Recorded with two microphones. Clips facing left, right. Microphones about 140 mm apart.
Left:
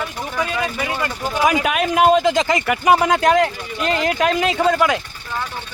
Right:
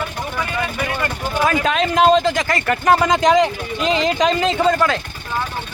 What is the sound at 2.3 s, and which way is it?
Speech, 20° left (ahead or behind).